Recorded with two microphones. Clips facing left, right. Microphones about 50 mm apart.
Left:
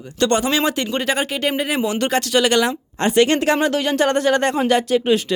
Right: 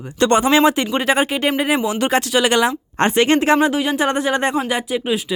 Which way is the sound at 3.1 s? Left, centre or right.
Right.